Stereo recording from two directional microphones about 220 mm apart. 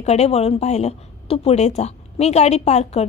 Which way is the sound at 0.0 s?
30° left (ahead or behind).